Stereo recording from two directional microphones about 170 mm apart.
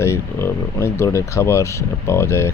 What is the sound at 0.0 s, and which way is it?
Speech, 15° left (ahead or behind).